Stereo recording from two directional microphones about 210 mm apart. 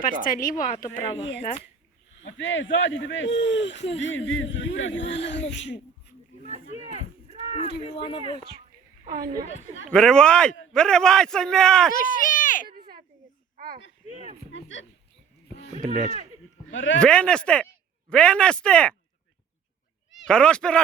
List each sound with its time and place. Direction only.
0.0 s a woman's voice: 40° left (ahead or behind)
2.2 s speech: 65° left (ahead or behind)
6.4 s a sound: 30° right (ahead or behind)
7.9 s speech: 25° left (ahead or behind)
9.0 s a woman's voice: 45° right (ahead or behind)
9.9 s a man's voice: 5° left (ahead or behind)
11.9 s run: 40° left (ahead or behind)
14.1 s speech: 35° right (ahead or behind)
14.5 s speech: 65° left (ahead or behind)
15.7 s speech: 35° right (ahead or behind)
16.7 s speech: 65° left (ahead or behind)
17.0 s a man's voice: 5° left (ahead or behind)
20.2 s a man's voice: 5° left (ahead or behind)